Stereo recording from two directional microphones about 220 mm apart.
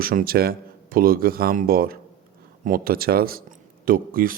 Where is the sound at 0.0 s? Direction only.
40° right (ahead or behind).